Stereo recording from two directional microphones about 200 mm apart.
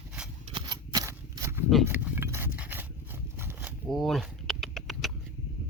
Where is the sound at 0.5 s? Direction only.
25° right (ahead or behind).